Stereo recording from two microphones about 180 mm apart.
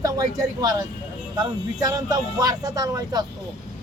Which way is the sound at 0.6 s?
20° right (ahead or behind).